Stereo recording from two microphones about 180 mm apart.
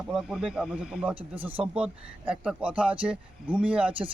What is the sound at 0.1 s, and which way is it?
Speech, 5° right (ahead or behind).